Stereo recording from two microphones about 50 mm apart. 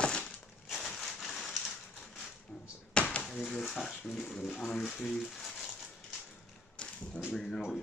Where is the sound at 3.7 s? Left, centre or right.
Centre.